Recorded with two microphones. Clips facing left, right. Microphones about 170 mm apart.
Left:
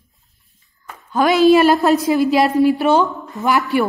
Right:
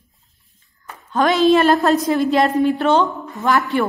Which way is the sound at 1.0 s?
Centre (ahead or behind).